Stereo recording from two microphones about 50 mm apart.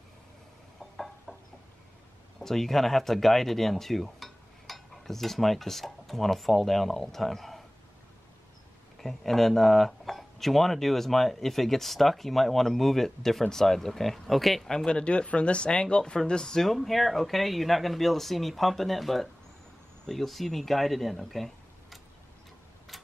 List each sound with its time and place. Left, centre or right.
0.9 s a sound: centre
2.4 s speech: centre
9.0 s speech: centre
14.9 s speech: left; by 21.5 s centre